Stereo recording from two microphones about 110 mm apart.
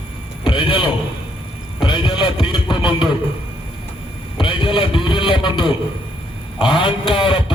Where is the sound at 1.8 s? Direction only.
45° left (ahead or behind).